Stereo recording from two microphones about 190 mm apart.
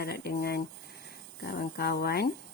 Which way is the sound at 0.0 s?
55° left (ahead or behind).